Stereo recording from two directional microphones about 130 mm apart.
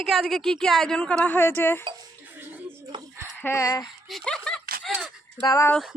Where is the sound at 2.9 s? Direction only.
35° right (ahead or behind).